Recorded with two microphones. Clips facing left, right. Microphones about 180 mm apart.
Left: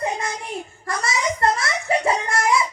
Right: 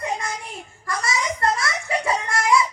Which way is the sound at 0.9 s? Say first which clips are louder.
Left 1 dB; 25° left (ahead or behind).